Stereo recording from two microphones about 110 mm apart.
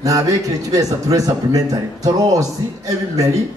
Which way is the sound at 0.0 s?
30° right (ahead or behind).